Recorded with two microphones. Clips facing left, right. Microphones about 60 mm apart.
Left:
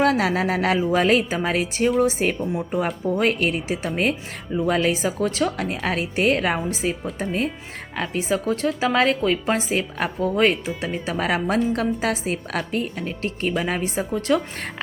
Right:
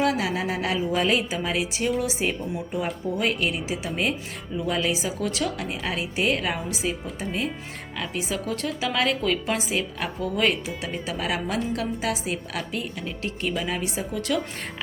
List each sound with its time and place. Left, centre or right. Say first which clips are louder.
0.0 s a woman's voice: left 5 dB; left
0.8 s a woman's voice: left 3 dB; left
5.7 s a woman's voice: left 4 dB; left
11.0 s a woman's voice: left 5 dB; left